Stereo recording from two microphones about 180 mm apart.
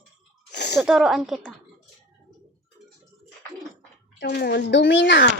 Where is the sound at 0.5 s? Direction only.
65° left (ahead or behind).